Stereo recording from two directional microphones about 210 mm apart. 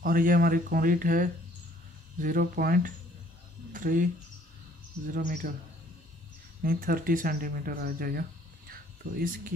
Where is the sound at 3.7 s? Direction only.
40° right (ahead or behind).